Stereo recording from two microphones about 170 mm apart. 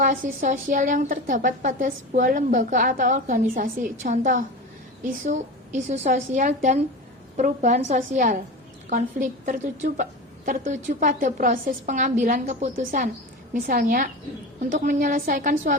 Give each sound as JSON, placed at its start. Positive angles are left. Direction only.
{"t": 0.0, "sound": "a woman's voice", "side_deg": -50}